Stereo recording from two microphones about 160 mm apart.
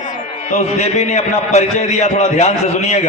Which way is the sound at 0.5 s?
45° left (ahead or behind).